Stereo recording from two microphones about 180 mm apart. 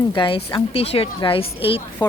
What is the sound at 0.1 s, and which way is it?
Speech, 30° left (ahead or behind).